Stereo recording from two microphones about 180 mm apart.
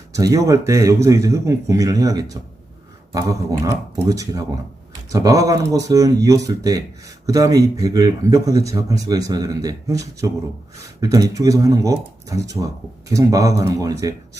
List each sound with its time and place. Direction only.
0.1 s a man's voice: 20° right (ahead or behind)